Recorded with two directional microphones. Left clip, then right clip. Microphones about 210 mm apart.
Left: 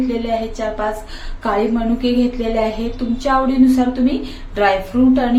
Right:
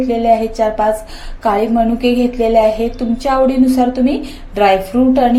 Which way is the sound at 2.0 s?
20° right (ahead or behind).